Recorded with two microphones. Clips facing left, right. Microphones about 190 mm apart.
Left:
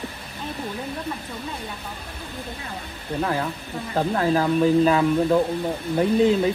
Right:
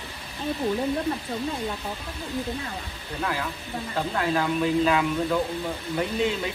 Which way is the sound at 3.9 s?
35° left (ahead or behind).